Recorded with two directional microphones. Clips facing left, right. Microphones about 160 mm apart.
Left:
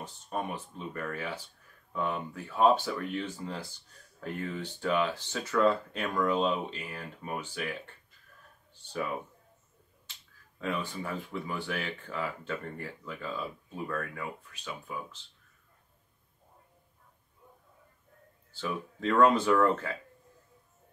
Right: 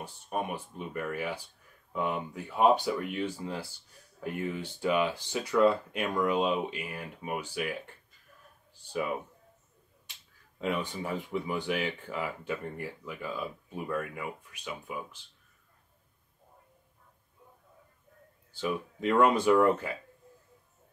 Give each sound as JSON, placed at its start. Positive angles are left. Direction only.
{"t": 0.0, "sound": "speech", "side_deg": -10}
{"t": 10.6, "sound": "speech", "side_deg": -20}
{"t": 18.5, "sound": "speech", "side_deg": -15}